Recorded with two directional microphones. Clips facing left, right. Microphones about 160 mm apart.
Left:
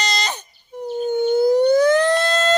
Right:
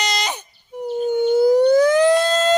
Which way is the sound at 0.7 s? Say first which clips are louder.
Right 2 dB; 10° right (ahead or behind).